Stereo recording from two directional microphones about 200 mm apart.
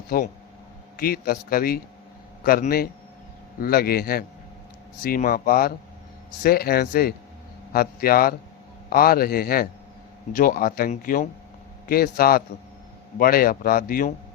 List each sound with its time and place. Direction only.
0.1 s speech: 45° left (ahead or behind)